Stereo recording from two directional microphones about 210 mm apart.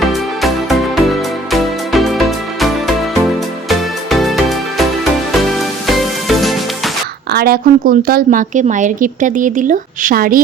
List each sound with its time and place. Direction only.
0.0 s music: centre (ahead or behind)
6.0 s music: centre (ahead or behind)
7.3 s a woman's voice: 45° right (ahead or behind)